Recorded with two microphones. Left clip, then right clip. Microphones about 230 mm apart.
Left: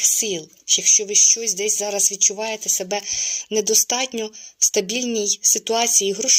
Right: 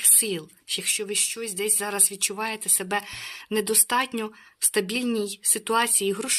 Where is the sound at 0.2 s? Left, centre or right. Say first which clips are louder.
Left 5 dB; centre.